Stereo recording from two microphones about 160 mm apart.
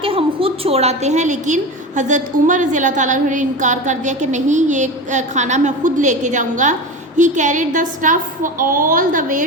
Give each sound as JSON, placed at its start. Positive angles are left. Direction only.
{"t": 0.0, "sound": "a woman's voice", "side_deg": -35}